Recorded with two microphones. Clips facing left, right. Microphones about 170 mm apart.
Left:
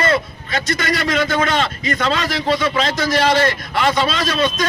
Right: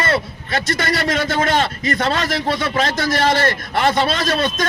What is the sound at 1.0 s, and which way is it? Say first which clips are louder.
A man's voice: left 2 dB; 45° right (ahead or behind).